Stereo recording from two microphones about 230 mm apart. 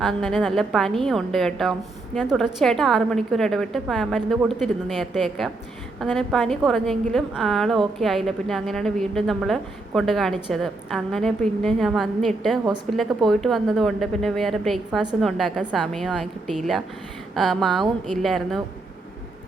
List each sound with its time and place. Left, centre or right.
0.0 s a woman's voice: centre